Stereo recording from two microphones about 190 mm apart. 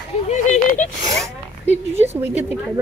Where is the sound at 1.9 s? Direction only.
35° right (ahead or behind).